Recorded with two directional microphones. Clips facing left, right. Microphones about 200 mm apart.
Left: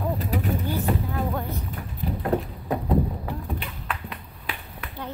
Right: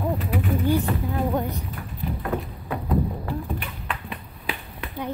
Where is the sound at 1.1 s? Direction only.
20° right (ahead or behind).